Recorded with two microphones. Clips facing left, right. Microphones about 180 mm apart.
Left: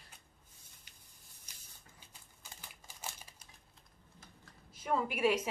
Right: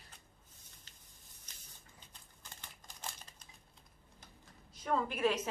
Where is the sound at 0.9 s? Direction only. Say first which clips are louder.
Right 1 dB; 10° left (ahead or behind).